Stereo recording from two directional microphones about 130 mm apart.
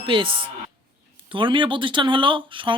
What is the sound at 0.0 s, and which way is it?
Speech, 40° right (ahead or behind).